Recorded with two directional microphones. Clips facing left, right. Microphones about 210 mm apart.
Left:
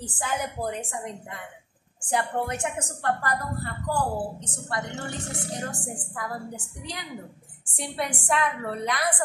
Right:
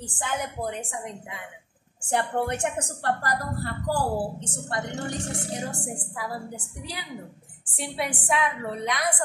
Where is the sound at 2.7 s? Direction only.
35° right (ahead or behind).